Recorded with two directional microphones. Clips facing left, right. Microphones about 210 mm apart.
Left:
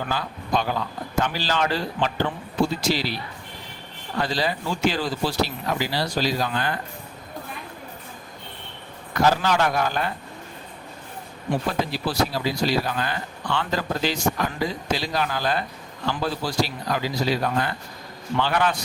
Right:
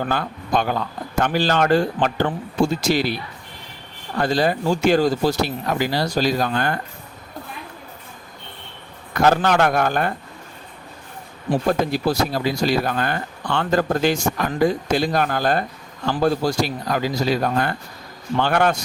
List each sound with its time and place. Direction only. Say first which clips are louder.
0.0 s speech: right 5 dB; 55° right (ahead or behind)
4.2 s speech: right 6 dB; 50° right (ahead or behind)
9.2 s speech: right 4 dB; 55° right (ahead or behind)
11.6 s speech: right 6 dB; 50° right (ahead or behind)